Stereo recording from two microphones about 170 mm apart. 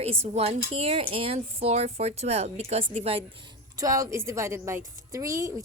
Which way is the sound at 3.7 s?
20° right (ahead or behind).